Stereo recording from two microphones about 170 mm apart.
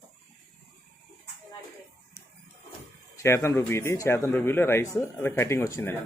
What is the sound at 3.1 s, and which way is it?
Speech, 15° left (ahead or behind).